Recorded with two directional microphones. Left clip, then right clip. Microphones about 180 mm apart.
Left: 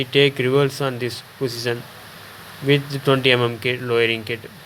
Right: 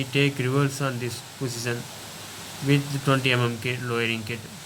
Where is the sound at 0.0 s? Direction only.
20° left (ahead or behind).